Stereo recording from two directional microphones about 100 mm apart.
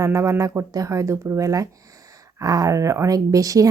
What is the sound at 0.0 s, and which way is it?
A woman's voice, 30° right (ahead or behind).